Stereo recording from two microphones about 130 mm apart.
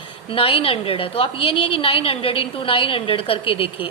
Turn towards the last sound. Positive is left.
turn(degrees=45)  # may be behind; listen again after turning